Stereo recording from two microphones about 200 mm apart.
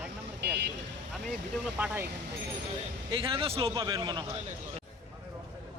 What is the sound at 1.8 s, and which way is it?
Speech, 10° right (ahead or behind).